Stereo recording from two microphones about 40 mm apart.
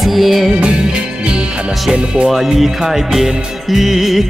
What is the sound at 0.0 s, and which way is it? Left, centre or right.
Music, centre.